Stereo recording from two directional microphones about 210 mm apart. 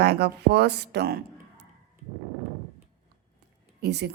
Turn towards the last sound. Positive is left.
turn(degrees=-50)  # may be behind; listen again after turning